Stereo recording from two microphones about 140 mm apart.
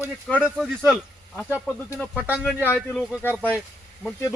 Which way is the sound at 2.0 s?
15° left (ahead or behind).